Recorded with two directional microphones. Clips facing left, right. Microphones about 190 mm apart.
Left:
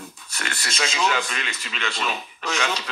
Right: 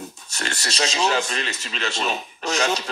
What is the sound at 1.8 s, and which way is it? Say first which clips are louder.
Speech: right 2 dB; 40° right (ahead or behind).